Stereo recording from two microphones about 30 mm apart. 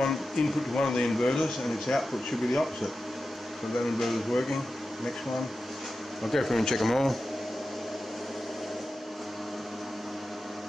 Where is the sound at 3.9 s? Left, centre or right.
Centre.